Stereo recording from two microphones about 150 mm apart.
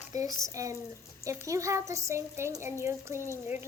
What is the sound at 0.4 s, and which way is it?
A woman's voice, 20° right (ahead or behind).